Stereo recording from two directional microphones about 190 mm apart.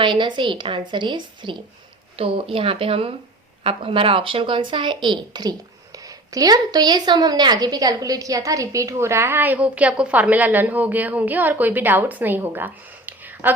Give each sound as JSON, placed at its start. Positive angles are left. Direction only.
{"t": 0.0, "sound": "a woman's voice", "side_deg": -25}